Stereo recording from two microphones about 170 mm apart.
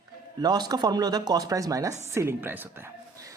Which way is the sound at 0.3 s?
25° right (ahead or behind).